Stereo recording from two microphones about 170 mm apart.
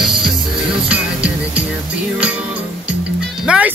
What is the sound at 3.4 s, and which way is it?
Music, 5° right (ahead or behind).